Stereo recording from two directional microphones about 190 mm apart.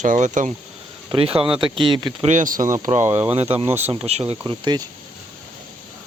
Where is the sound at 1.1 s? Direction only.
30° right (ahead or behind).